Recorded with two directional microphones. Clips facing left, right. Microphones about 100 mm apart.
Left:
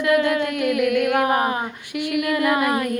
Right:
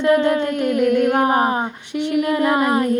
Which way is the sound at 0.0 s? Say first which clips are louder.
Right 3 dB; 30° right (ahead or behind).